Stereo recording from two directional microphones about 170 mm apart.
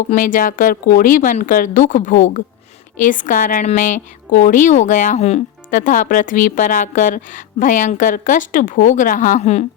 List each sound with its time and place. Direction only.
0.1 s a woman's voice: 50° left (ahead or behind)